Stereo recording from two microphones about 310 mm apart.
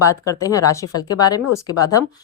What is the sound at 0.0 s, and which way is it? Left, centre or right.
Speech, centre.